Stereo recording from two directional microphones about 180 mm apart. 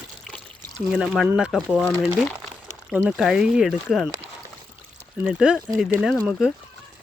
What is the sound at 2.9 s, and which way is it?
Speech, 5° right (ahead or behind).